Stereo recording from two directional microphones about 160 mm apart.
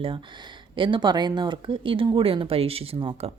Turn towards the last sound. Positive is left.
turn(degrees=-35)  # may be behind; listen again after turning